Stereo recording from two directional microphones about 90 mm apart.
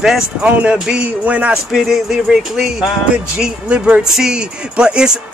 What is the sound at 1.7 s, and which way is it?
Speech, 5° right (ahead or behind).